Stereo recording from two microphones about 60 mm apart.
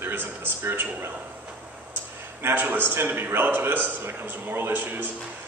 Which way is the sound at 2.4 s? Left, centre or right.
Right.